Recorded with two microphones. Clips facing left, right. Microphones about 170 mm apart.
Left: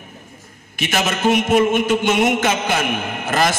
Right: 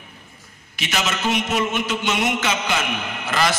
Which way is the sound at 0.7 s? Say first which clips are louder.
Left 4 dB; 50° left (ahead or behind).